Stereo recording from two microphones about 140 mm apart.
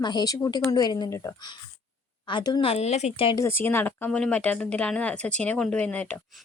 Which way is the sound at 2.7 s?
50° left (ahead or behind).